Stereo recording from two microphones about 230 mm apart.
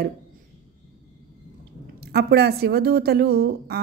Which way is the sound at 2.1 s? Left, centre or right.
Right.